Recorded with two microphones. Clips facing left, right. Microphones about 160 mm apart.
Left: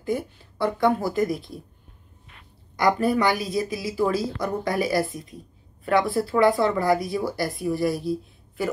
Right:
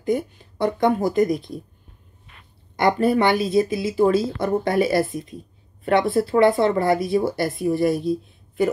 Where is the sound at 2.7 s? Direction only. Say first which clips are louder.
Right 3 dB; 25° right (ahead or behind).